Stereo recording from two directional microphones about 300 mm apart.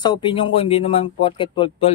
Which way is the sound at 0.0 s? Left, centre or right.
Centre.